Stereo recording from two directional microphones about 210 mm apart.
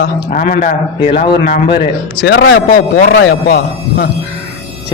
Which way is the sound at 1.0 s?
20° left (ahead or behind).